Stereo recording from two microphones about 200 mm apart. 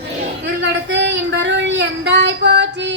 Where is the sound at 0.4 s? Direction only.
60° right (ahead or behind).